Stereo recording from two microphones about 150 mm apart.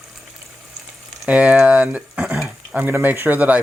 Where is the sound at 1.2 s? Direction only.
5° right (ahead or behind).